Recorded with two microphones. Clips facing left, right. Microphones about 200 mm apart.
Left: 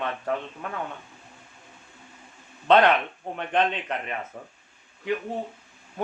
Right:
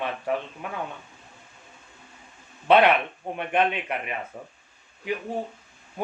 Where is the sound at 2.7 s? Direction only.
10° right (ahead or behind).